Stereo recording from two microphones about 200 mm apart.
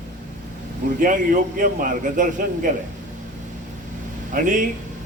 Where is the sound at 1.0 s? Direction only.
40° right (ahead or behind).